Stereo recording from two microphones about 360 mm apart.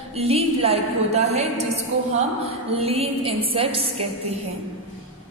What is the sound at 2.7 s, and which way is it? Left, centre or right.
A woman's voice, centre.